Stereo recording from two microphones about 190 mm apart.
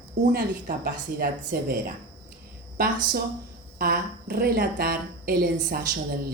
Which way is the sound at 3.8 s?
50° right (ahead or behind).